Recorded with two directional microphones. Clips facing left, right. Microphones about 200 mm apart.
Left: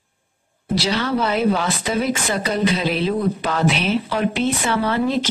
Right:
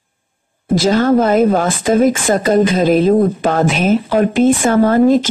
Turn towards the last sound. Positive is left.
turn(degrees=-45)  # may be behind; listen again after turning